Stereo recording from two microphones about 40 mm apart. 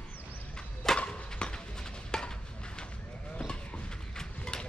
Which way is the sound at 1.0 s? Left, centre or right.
Left.